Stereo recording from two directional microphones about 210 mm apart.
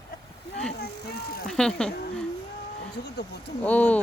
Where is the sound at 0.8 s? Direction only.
50° left (ahead or behind).